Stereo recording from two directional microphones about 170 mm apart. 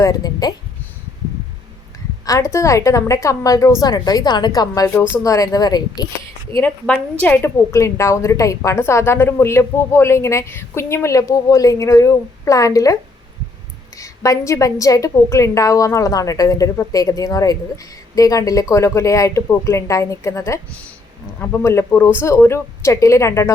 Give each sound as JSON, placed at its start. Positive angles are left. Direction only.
{"t": 0.0, "sound": "a woman's voice", "side_deg": 20}
{"t": 2.2, "sound": "a woman's voice", "side_deg": 20}
{"t": 6.6, "sound": "a woman's voice", "side_deg": 10}